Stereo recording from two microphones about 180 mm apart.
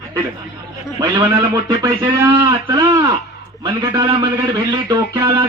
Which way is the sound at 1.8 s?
20° right (ahead or behind).